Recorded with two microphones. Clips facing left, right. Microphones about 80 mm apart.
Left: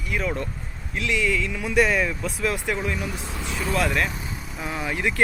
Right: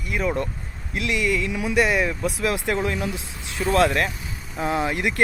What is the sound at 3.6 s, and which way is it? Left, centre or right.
Speech, right.